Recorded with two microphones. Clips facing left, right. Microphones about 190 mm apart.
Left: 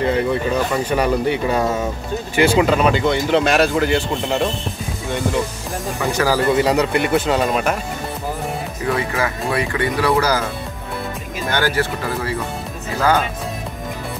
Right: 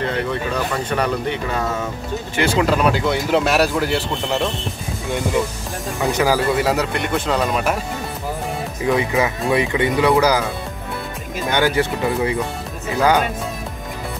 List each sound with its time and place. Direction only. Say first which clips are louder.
0.0 s speech: left 4 dB; 10° left (ahead or behind)
6.1 s speech: even; 15° right (ahead or behind)
6.5 s speech: left 3 dB; centre (ahead or behind)
8.8 s speech: right 3 dB; 15° right (ahead or behind)
11.5 s speech: right 2 dB; 20° right (ahead or behind)